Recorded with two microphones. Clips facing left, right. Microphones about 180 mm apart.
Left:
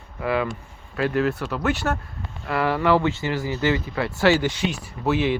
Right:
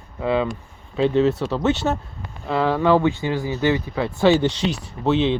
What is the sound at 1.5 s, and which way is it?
Speech, 25° right (ahead or behind).